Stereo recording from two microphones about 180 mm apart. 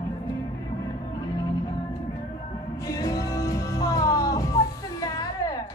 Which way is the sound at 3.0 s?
20° left (ahead or behind).